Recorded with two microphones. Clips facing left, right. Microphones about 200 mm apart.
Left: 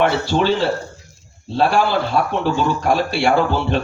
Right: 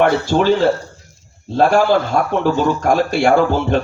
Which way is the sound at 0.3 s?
50° right (ahead or behind).